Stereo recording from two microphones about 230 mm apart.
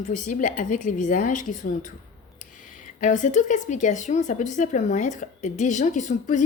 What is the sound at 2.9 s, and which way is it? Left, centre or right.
A woman's voice, left.